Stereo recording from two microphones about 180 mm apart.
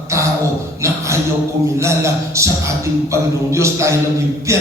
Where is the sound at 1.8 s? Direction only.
15° right (ahead or behind).